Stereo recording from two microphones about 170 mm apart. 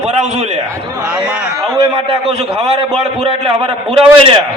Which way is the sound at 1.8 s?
35° right (ahead or behind).